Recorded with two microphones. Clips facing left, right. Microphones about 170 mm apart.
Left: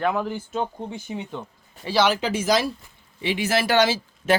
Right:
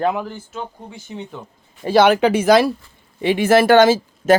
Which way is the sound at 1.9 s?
55° right (ahead or behind).